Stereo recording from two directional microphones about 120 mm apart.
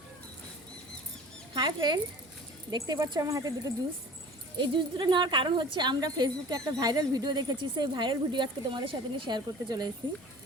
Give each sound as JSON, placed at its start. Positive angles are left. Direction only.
{"t": 1.5, "sound": "speech", "side_deg": -40}
{"t": 4.5, "sound": "speech", "side_deg": -40}